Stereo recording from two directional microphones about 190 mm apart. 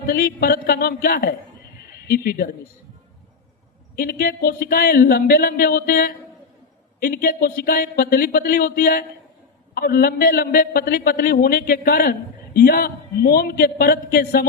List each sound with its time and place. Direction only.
0.1 s speech: 55° left (ahead or behind)
3.9 s a man's voice: 50° left (ahead or behind)